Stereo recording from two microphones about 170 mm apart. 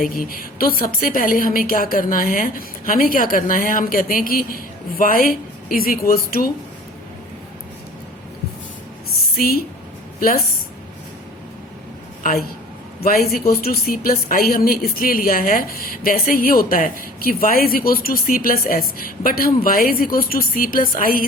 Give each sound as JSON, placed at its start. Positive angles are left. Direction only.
{"t": 0.0, "sound": "speech", "side_deg": 55}
{"t": 9.3, "sound": "speech", "side_deg": 60}
{"t": 13.0, "sound": "speech", "side_deg": 60}